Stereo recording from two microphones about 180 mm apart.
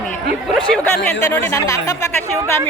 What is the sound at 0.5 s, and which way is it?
Speech, 5° left (ahead or behind).